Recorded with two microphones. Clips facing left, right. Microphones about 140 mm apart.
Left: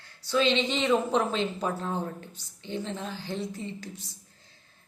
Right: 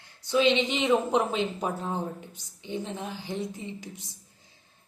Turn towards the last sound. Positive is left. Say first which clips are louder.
# left 1 dB
turn(degrees=-15)  # may be behind; listen again after turning